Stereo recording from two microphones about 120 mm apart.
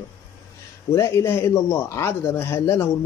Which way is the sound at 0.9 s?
25° left (ahead or behind).